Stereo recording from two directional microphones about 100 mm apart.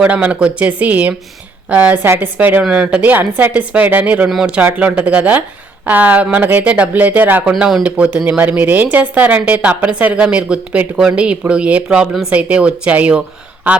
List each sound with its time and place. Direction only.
0.0 s a woman's voice: 15° right (ahead or behind)